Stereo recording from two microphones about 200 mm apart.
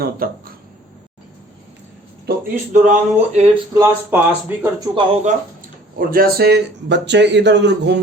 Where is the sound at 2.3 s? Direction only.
40° right (ahead or behind).